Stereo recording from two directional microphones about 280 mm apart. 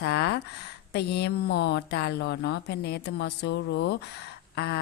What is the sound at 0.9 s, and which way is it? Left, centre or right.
A woman's voice, left.